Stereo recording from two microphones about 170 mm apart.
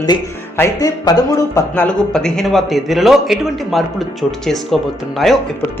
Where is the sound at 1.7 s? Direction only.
5° left (ahead or behind).